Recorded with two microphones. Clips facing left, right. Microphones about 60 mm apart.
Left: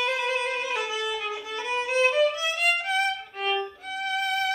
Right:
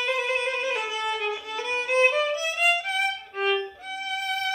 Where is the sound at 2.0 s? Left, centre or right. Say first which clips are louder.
Left 3 dB; centre.